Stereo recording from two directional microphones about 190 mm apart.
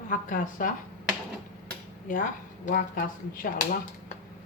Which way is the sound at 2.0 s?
45° left (ahead or behind).